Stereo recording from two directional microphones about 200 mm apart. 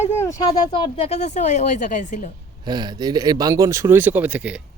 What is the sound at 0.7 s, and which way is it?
Speech, 25° left (ahead or behind).